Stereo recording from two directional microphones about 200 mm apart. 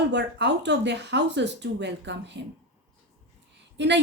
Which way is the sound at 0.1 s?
60° right (ahead or behind).